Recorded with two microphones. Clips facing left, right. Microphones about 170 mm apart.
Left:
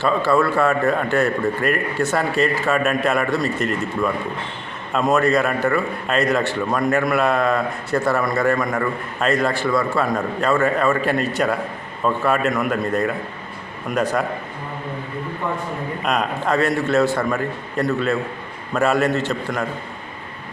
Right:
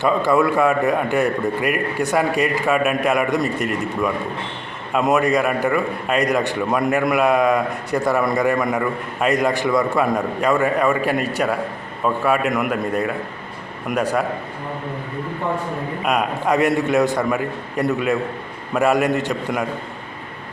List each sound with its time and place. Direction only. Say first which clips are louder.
0.0 s a man's voice: right 1 dB; 15° right (ahead or behind)
16.0 s a man's voice: right 2 dB; 10° right (ahead or behind)